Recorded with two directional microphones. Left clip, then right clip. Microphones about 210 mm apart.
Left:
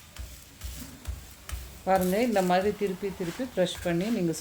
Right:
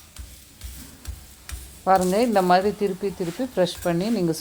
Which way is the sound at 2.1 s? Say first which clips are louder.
Right 6 dB; 15° right (ahead or behind).